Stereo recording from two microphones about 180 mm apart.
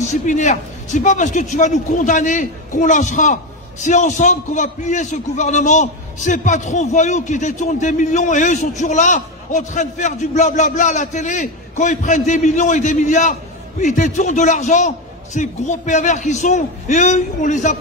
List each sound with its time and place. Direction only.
0.0 s a man's voice: 45° left (ahead or behind)